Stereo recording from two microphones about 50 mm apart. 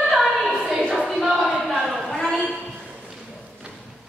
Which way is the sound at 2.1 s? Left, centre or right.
Centre.